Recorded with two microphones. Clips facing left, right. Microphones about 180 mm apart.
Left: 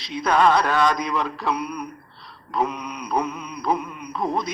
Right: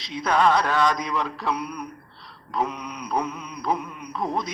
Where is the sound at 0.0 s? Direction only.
60° left (ahead or behind).